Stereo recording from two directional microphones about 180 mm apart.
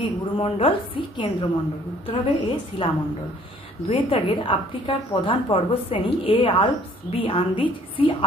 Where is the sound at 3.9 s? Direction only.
30° left (ahead or behind).